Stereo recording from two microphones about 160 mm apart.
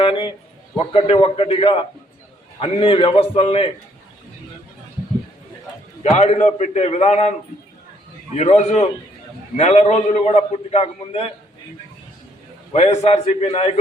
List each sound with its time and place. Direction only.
0.0 s a sound: 35° left (ahead or behind)
0.8 s a man's voice: 35° left (ahead or behind)
6.0 s a man's voice: 45° left (ahead or behind)
8.4 s a man's voice: 45° left (ahead or behind)
12.7 s a man's voice: 40° left (ahead or behind)